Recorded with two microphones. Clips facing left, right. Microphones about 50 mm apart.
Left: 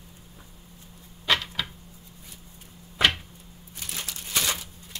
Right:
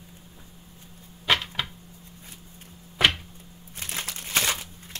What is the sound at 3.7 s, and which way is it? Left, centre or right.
Crumpling, right.